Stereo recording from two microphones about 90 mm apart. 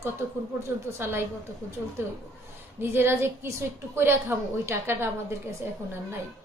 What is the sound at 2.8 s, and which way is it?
A woman's voice, 25° right (ahead or behind).